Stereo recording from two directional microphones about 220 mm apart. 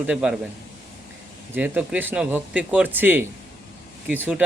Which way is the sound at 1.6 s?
5° right (ahead or behind).